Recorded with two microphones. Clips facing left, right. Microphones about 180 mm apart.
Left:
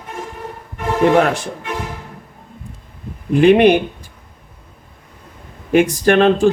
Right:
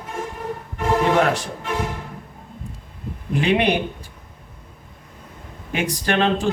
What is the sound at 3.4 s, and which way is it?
Speech, 55° left (ahead or behind).